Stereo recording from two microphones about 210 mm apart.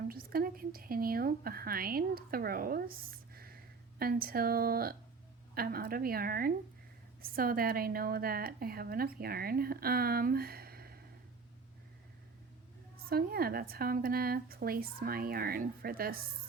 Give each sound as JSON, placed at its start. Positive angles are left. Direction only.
{"t": 0.1, "sound": "a woman's voice", "side_deg": -45}
{"t": 3.3, "sound": "a sound", "side_deg": -45}
{"t": 5.5, "sound": "a woman's voice", "side_deg": -45}
{"t": 13.1, "sound": "a woman's voice", "side_deg": -45}